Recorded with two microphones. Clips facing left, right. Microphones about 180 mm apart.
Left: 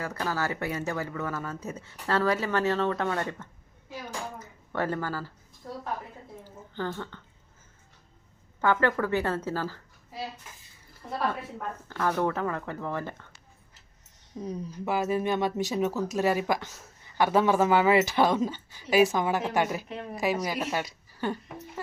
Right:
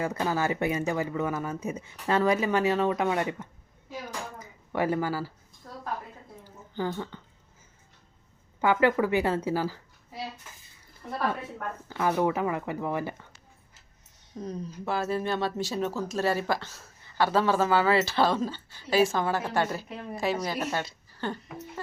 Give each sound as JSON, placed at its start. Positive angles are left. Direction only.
{"t": 0.0, "sound": "speech", "side_deg": -20}
{"t": 4.4, "sound": "a sound", "side_deg": -15}
{"t": 6.7, "sound": "speech", "side_deg": -10}
{"t": 8.6, "sound": "speech", "side_deg": -10}
{"t": 11.9, "sound": "speech", "side_deg": -10}
{"t": 14.3, "sound": "speech", "side_deg": 10}